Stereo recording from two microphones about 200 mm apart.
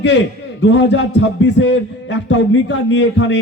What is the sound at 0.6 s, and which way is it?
A man's voice, 60° left (ahead or behind).